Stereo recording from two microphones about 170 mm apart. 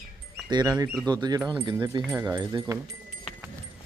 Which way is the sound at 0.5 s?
25° right (ahead or behind).